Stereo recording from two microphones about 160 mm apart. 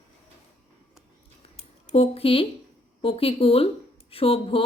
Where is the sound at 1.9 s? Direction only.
35° left (ahead or behind).